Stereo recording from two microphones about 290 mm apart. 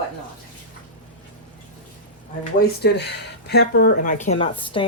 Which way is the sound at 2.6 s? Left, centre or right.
Left.